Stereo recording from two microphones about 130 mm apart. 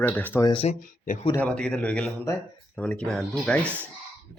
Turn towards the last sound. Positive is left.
turn(degrees=5)  # may be behind; listen again after turning